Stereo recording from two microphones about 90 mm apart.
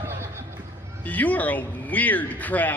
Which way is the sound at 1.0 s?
20° left (ahead or behind).